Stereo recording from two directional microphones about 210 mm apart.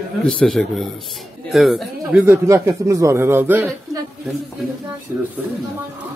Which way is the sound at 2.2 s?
10° right (ahead or behind).